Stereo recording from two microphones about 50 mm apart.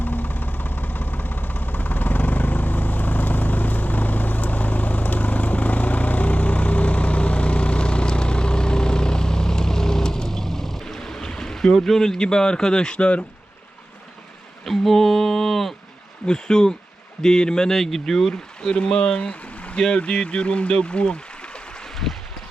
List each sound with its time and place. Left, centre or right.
0.0 s vehicle: left
14.6 s a sound: centre
16.2 s speech: centre
18.7 s speech: centre